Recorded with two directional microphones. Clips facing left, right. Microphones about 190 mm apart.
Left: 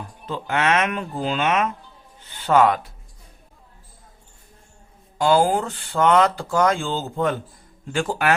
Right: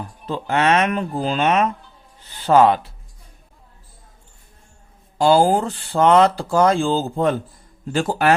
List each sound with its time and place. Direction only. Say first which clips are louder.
0.3 s speech: right 3 dB; 35° right (ahead or behind)
5.1 s speech: right 3 dB; 30° right (ahead or behind)